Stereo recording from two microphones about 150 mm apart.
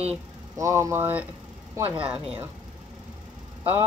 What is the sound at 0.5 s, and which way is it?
A woman's voice, 20° right (ahead or behind).